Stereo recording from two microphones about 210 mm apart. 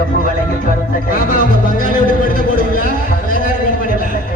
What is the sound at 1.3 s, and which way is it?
Music, 40° left (ahead or behind).